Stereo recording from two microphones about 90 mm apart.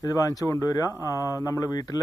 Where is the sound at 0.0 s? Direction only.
40° left (ahead or behind).